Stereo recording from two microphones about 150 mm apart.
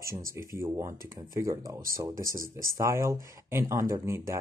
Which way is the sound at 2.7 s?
20° right (ahead or behind).